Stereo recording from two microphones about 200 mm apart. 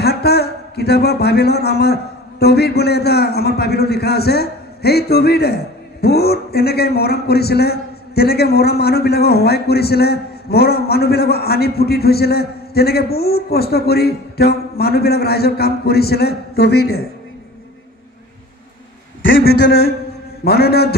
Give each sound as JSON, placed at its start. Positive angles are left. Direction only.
{"t": 0.0, "sound": "a man's voice", "side_deg": 55}
{"t": 19.4, "sound": "a man's voice", "side_deg": 50}